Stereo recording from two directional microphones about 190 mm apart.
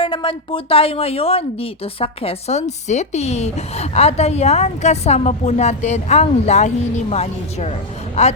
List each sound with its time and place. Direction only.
0.0 s speech: 25° left (ahead or behind)